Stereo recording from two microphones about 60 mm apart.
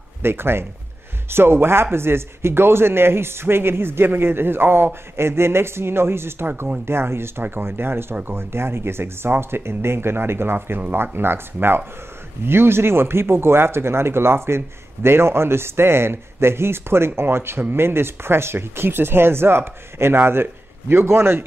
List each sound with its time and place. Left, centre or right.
0.2 s speech: right